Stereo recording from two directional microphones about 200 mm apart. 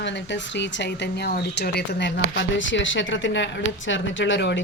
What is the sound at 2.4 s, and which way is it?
A woman's voice, 65° left (ahead or behind).